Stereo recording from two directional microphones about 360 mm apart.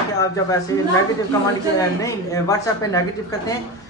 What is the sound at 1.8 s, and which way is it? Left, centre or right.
Speech, centre.